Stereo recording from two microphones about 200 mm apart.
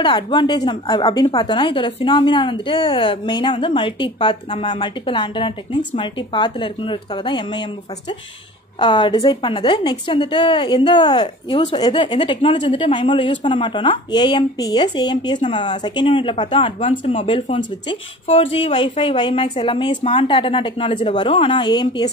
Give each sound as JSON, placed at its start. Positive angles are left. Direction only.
{"t": 0.0, "sound": "a woman's voice", "side_deg": 25}
{"t": 8.7, "sound": "a woman's voice", "side_deg": 25}